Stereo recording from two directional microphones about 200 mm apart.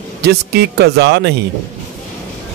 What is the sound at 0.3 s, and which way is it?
Speech, 55° right (ahead or behind).